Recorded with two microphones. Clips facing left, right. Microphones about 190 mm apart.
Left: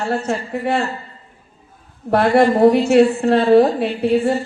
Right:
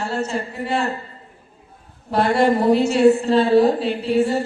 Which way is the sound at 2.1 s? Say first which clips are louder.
Left 3 dB; 60° left (ahead or behind).